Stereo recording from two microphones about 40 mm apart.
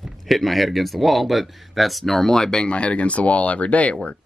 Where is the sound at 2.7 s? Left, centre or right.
Left.